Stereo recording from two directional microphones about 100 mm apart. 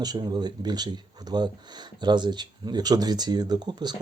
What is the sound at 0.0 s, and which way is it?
Speech, 45° right (ahead or behind).